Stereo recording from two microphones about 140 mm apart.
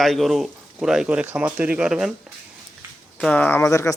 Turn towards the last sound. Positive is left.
turn(degrees=20)  # may be behind; listen again after turning